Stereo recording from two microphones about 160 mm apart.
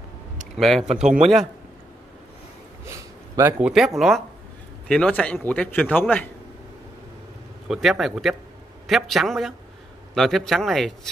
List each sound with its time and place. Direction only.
0.6 s speech: centre (ahead or behind)
2.8 s a man's voice: 20° right (ahead or behind); by 6.3 s 10° left (ahead or behind)
7.6 s speech: 5° right (ahead or behind)